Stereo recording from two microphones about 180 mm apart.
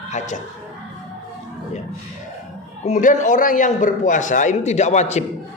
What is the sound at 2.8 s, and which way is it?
A man's voice, 45° left (ahead or behind).